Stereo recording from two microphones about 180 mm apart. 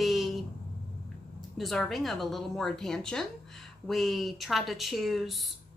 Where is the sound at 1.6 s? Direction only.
Centre (ahead or behind).